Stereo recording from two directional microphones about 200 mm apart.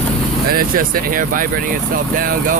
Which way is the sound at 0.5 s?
45° right (ahead or behind).